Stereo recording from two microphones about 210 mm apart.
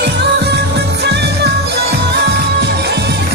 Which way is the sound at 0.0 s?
50° right (ahead or behind).